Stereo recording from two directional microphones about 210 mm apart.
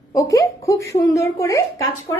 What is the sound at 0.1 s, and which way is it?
A woman's voice, 15° left (ahead or behind).